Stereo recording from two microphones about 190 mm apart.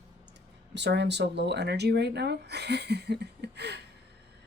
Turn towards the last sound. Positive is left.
turn(degrees=-60)  # may be behind; listen again after turning